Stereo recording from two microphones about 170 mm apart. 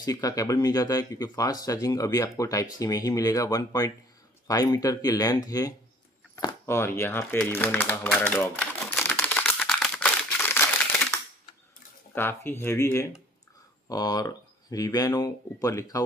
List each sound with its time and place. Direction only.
0.0 s speech: 20° left (ahead or behind)
6.3 s typewriter: 15° left (ahead or behind)
12.1 s speech: 10° left (ahead or behind)